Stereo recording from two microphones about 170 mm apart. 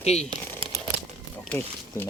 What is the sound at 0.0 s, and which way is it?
Speech, 40° left (ahead or behind).